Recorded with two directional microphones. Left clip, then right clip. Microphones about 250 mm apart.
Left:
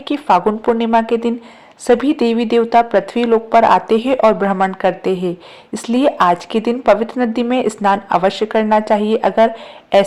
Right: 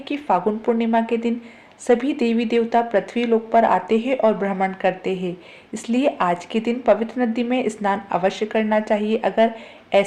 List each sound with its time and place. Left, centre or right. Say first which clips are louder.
0.0 s speech: left 7 dB; left